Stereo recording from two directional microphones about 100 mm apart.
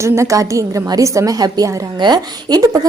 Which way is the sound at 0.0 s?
30° right (ahead or behind).